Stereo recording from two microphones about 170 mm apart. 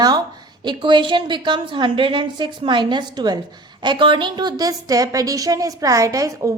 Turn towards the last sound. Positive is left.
turn(degrees=-20)  # may be behind; listen again after turning